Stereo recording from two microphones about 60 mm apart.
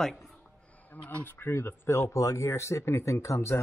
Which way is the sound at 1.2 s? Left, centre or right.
Left.